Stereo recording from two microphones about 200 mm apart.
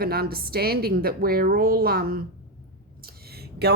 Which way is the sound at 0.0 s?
50° right (ahead or behind).